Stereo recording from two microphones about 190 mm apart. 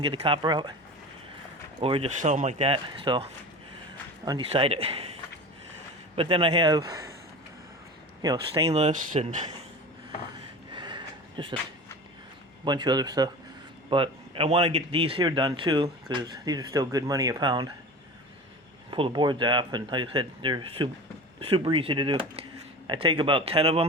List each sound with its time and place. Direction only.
0.0 s speech: 30° right (ahead or behind)
1.8 s speech: 30° right (ahead or behind)
4.3 s speech: 30° right (ahead or behind)
6.1 s speech: 30° right (ahead or behind)
8.6 s speech: 35° right (ahead or behind)
10.7 s a sound: 25° right (ahead or behind)
12.6 s speech: 20° right (ahead or behind)
18.9 s speech: 25° right (ahead or behind)